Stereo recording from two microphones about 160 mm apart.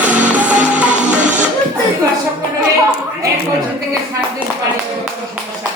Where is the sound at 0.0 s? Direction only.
10° right (ahead or behind).